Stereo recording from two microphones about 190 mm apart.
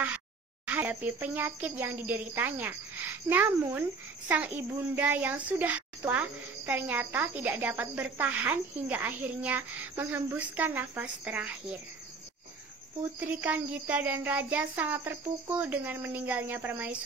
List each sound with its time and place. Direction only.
0.7 s a child's voice: 10° right (ahead or behind)
13.3 s a child's voice: 10° right (ahead or behind)